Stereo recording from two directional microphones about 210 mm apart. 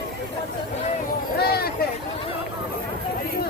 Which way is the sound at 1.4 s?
50° left (ahead or behind).